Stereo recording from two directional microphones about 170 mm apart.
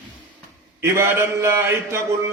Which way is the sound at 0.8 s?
15° right (ahead or behind).